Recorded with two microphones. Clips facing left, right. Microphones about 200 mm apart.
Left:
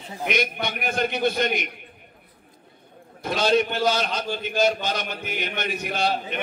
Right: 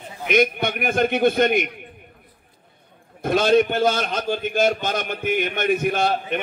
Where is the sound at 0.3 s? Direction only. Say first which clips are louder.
Right 7 dB; 50° right (ahead or behind).